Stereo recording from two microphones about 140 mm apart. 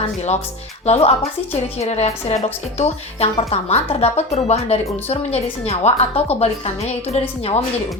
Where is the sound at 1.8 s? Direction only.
50° left (ahead or behind).